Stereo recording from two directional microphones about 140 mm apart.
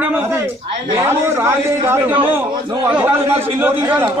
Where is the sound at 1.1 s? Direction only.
20° right (ahead or behind).